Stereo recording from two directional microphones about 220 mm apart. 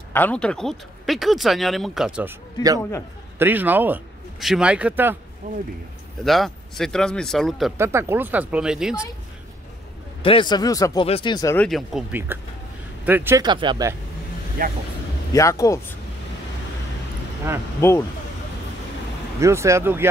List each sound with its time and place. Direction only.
0.1 s speech: 5° left (ahead or behind)
3.3 s speech: 10° right (ahead or behind)
5.4 s speech: 35° right (ahead or behind)
6.2 s speech: centre (ahead or behind)
7.7 s speech: 10° right (ahead or behind)
10.2 s speech: 20° left (ahead or behind)
11.5 s speech: centre (ahead or behind); by 13.9 s 20° right (ahead or behind)
14.6 s speech: 40° right (ahead or behind)
15.3 s speech: 15° left (ahead or behind)
17.7 s speech: 10° left (ahead or behind)
19.4 s speech: 15° right (ahead or behind)